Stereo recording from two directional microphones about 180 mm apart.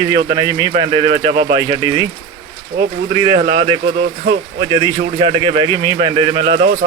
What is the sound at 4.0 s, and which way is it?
Speech, 75° right (ahead or behind).